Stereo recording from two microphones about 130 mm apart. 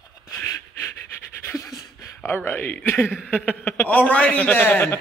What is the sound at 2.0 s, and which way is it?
Speech, 20° left (ahead or behind).